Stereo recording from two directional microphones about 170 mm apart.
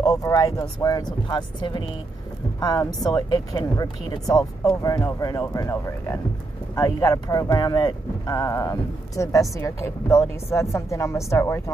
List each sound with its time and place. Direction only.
0.1 s speech: 20° left (ahead or behind)